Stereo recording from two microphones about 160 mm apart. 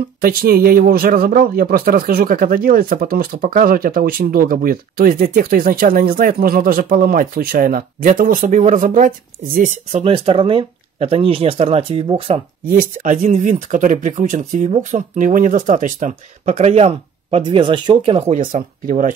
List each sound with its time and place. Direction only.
0.2 s speech: 70° right (ahead or behind)
10.0 s speech: 35° right (ahead or behind)
12.6 s speech: 55° right (ahead or behind)